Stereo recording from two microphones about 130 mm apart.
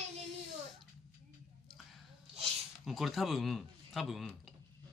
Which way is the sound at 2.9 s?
Centre (ahead or behind).